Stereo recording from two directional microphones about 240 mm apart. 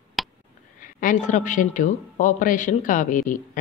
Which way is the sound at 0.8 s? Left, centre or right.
Left.